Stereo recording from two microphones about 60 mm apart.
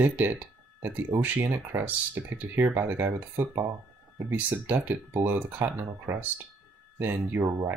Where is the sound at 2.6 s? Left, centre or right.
Right.